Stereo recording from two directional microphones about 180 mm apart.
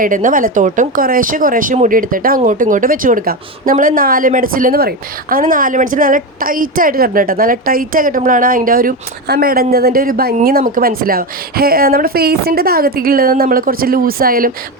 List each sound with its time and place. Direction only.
0.0 s a woman's voice: 45° right (ahead or behind)